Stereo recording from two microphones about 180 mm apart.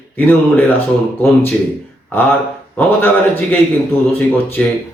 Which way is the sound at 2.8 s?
10° left (ahead or behind).